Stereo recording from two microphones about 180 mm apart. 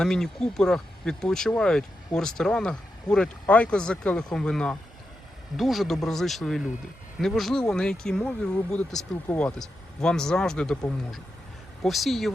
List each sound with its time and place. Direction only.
0.0 s speech: 5° left (ahead or behind)